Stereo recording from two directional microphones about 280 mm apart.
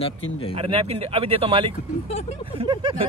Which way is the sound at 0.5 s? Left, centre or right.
Centre.